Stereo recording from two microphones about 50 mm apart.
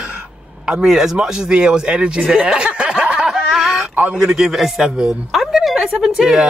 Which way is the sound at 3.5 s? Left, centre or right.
Centre.